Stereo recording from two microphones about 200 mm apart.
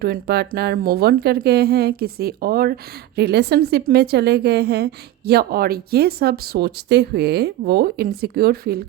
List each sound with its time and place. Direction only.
0.0 s a woman's voice: 50° right (ahead or behind)